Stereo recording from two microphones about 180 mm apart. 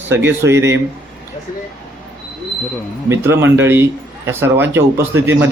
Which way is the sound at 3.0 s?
15° right (ahead or behind).